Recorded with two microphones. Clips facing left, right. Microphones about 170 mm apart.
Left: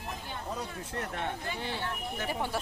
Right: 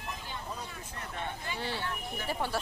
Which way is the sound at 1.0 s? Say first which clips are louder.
Left 4 dB; 70° left (ahead or behind).